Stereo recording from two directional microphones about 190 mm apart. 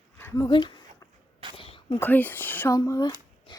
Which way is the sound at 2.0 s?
10° left (ahead or behind).